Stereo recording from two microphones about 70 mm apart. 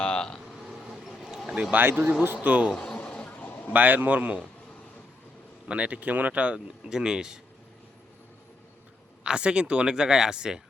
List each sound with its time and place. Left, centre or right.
0.0 s a sound: centre
0.4 s vehicle: centre
1.7 s a man's voice: right
2.7 s a sound: centre
3.7 s a man's voice: right
5.6 s speech: centre
9.2 s speech: centre